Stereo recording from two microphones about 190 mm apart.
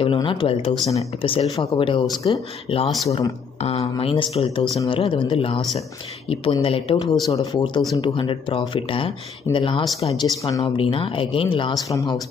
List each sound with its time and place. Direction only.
0.0 s speech: 25° left (ahead or behind)